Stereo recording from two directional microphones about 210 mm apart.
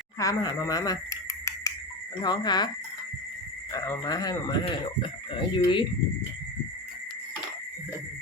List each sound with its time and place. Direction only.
0.2 s a sound: 15° left (ahead or behind)
2.2 s speech: 20° left (ahead or behind)
3.7 s speech: 15° left (ahead or behind)